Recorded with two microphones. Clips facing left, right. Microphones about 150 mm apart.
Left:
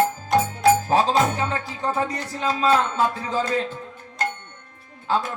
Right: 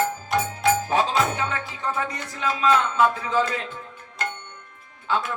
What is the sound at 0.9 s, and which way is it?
Music, 35° left (ahead or behind).